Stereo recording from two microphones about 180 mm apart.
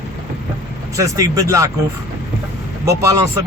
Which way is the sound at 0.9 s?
20° right (ahead or behind).